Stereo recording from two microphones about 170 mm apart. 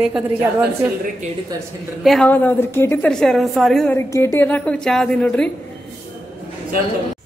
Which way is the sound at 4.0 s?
15° left (ahead or behind).